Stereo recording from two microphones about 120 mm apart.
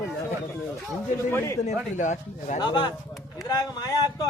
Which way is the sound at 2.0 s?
90° left.